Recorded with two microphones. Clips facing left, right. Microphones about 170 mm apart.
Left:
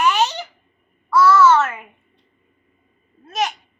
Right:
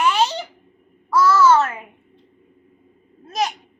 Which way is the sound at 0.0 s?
30° right (ahead or behind).